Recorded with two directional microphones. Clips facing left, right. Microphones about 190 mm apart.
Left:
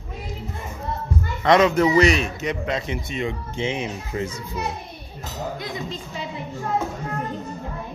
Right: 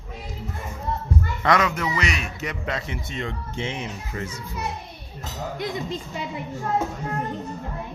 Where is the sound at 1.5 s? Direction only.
25° left (ahead or behind).